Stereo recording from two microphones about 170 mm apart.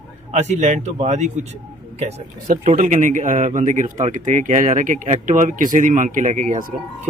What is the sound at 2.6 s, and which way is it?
Speech, 45° right (ahead or behind).